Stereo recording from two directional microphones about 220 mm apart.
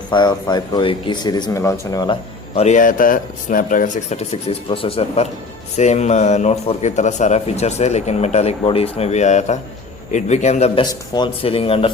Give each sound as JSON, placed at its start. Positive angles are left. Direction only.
{"t": 0.1, "sound": "speech", "side_deg": 20}
{"t": 2.6, "sound": "a man's voice", "side_deg": 35}